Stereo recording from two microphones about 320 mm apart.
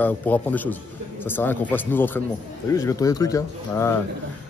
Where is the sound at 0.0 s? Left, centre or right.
Centre.